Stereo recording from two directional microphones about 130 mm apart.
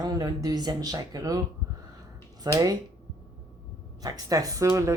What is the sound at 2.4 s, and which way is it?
Speech, 30° right (ahead or behind).